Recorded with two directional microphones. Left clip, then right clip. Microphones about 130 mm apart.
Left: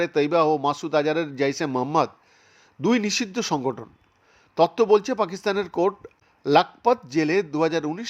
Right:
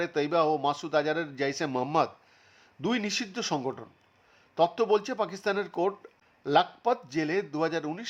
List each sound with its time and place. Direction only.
0.0 s a man's voice: 25° left (ahead or behind)